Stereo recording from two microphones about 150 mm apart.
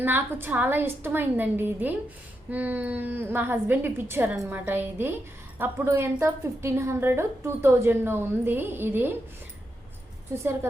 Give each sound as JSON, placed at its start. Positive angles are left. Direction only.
{"t": 0.0, "sound": "a woman's voice", "side_deg": -15}
{"t": 10.3, "sound": "a woman's voice", "side_deg": -20}